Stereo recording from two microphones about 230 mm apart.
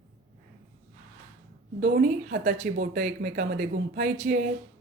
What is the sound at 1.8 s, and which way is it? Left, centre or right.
Speech, right.